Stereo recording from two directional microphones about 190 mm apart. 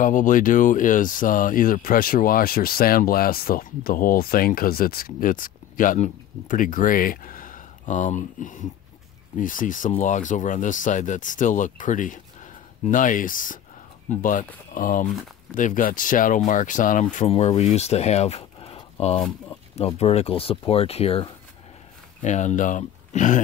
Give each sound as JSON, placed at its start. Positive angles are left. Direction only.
{"t": 0.0, "sound": "speech", "side_deg": 45}